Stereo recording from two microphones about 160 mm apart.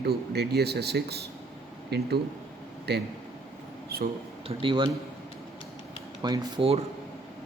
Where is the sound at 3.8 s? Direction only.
70° right (ahead or behind).